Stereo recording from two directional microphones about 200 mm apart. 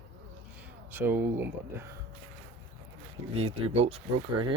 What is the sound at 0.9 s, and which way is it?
Speech, 10° right (ahead or behind).